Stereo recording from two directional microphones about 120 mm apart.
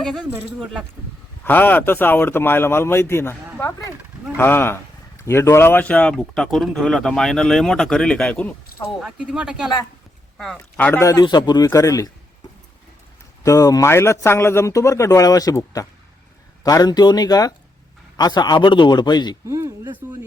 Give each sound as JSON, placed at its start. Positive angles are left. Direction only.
{"t": 0.0, "sound": "speech", "side_deg": -5}
{"t": 1.5, "sound": "speech", "side_deg": 15}
{"t": 4.4, "sound": "speech", "side_deg": 20}
{"t": 9.0, "sound": "speech", "side_deg": -5}
{"t": 10.3, "sound": "speech", "side_deg": 5}
{"t": 11.0, "sound": "a man's voice", "side_deg": 30}
{"t": 13.4, "sound": "a man's voice", "side_deg": 30}
{"t": 19.5, "sound": "speech", "side_deg": -25}